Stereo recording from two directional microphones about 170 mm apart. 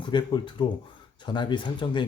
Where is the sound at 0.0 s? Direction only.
25° left (ahead or behind).